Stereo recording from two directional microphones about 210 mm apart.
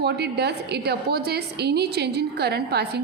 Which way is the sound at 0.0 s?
50° right (ahead or behind).